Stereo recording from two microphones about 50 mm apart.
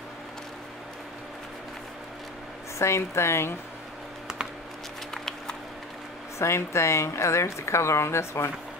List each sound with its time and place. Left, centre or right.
2.8 s a woman's voice: left
5.1 s a sound: centre
6.3 s speech: left